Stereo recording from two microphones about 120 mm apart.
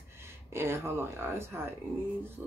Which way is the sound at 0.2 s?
20° right (ahead or behind).